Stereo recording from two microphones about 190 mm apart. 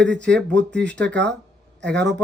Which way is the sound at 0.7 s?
70° right (ahead or behind).